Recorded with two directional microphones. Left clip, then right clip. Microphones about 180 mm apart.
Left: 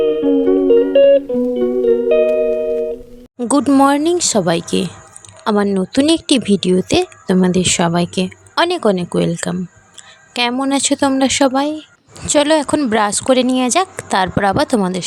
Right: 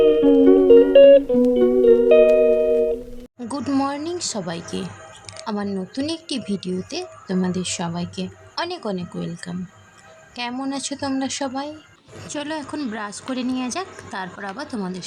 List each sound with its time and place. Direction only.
0.0 s music: centre (ahead or behind)
3.3 s a woman's voice: 45° left (ahead or behind)
12.3 s a woman's voice: 65° left (ahead or behind)